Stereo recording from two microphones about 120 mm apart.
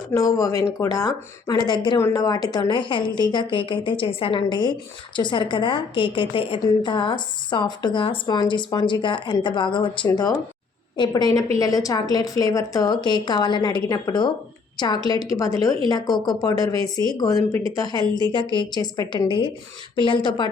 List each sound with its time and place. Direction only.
0.1 s a woman's voice: 30° left (ahead or behind)
2.0 s a woman's voice: 25° left (ahead or behind)